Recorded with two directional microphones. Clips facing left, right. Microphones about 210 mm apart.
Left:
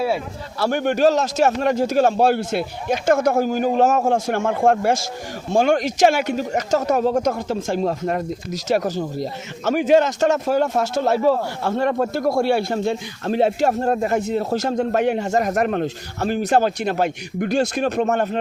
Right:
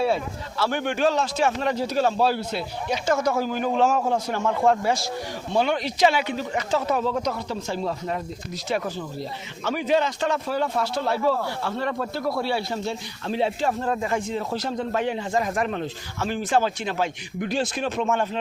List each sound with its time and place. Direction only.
0.6 s speech: 45° left (ahead or behind)
15.4 s speech: 60° left (ahead or behind)
16.6 s speech: 45° left (ahead or behind)